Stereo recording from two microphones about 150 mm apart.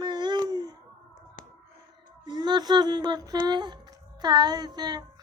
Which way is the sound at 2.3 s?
30° right (ahead or behind).